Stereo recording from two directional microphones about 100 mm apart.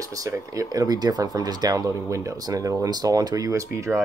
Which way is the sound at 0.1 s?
35° right (ahead or behind).